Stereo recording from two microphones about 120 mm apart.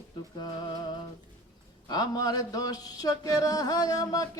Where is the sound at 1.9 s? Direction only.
35° left (ahead or behind).